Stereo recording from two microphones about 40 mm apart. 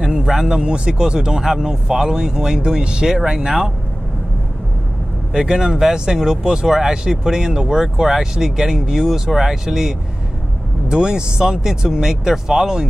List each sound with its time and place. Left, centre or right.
0.0 s a man's voice: centre
0.6 s speech: right
5.3 s speech: centre
10.9 s speech: centre